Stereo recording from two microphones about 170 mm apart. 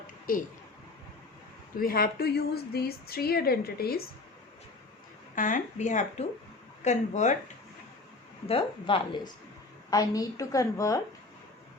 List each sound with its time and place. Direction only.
1.8 s a woman's voice: 60° left (ahead or behind)
5.3 s speech: 50° left (ahead or behind)
8.4 s a woman's voice: 30° left (ahead or behind)